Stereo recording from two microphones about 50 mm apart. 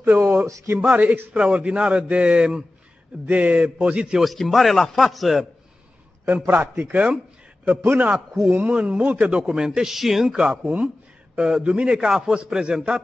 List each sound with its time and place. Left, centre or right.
0.1 s a sound: right
0.5 s speech: right
0.7 s a man's voice: right
4.2 s a man's voice: centre
6.2 s a man's voice: right
7.8 s a man's voice: right
9.4 s a man's voice: centre
10.3 s a man's voice: centre